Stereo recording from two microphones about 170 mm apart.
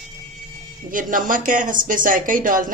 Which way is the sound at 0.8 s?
55° right (ahead or behind).